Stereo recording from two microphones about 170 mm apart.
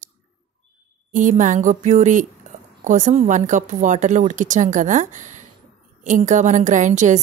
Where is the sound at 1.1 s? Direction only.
50° right (ahead or behind).